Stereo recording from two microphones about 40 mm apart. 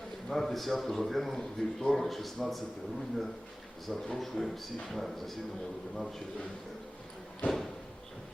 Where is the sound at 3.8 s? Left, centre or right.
Centre.